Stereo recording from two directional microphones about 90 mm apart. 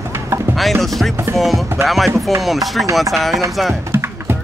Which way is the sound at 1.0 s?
Centre (ahead or behind).